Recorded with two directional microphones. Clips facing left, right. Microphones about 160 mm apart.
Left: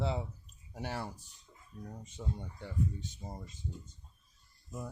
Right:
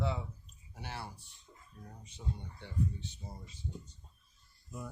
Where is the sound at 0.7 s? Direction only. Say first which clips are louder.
Left 5 dB; 40° left (ahead or behind).